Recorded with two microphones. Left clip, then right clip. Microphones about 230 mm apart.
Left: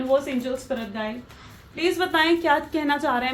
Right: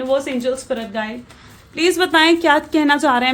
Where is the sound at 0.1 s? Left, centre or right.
Right.